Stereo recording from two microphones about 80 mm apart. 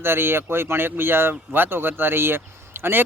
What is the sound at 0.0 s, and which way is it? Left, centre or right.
A man's voice, right.